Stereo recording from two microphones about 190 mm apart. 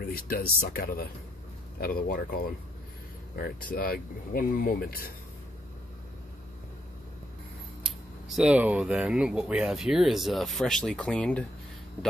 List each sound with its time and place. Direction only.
0.0 s speech: 50° left (ahead or behind)
7.8 s speech: centre (ahead or behind)